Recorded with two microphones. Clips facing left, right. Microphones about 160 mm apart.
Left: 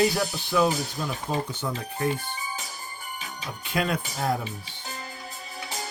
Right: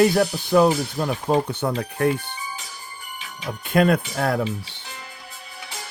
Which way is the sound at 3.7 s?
55° right (ahead or behind).